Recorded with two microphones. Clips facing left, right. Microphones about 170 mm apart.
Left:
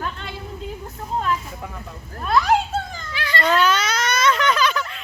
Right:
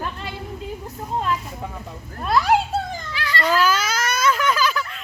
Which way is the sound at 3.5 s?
5° right (ahead or behind).